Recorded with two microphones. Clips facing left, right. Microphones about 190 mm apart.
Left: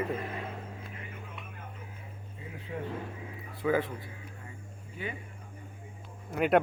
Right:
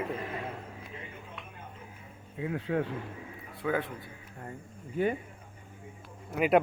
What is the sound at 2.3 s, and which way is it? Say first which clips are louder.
Speech: right 10 dB; 80° right.